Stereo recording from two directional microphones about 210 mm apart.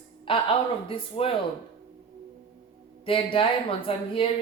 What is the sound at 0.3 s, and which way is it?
Speech, 25° left (ahead or behind).